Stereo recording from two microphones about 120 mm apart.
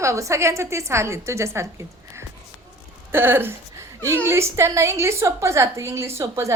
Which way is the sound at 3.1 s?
20° right (ahead or behind).